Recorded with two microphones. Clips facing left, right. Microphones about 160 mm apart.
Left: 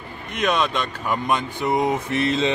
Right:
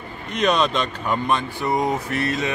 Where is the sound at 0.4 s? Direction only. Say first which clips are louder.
Right 2 dB; 5° left (ahead or behind).